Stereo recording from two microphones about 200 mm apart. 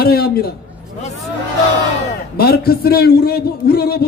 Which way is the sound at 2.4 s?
50° left (ahead or behind).